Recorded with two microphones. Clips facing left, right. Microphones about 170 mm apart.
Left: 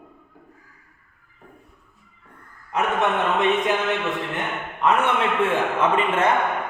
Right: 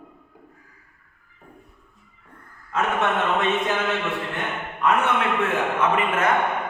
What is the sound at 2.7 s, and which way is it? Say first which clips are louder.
Speech: left 1 dB; 15° left (ahead or behind).